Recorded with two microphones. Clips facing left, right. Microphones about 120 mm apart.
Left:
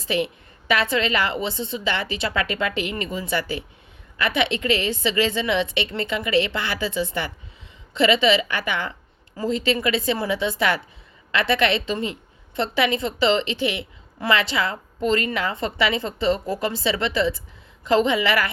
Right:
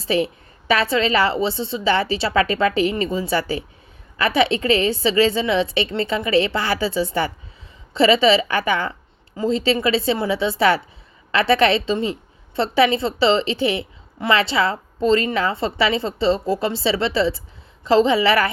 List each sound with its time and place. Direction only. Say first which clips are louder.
0.0 s a woman's voice: right 4 dB; 35° right (ahead or behind)